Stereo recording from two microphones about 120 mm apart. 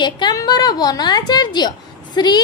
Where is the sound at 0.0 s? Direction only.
35° left (ahead or behind).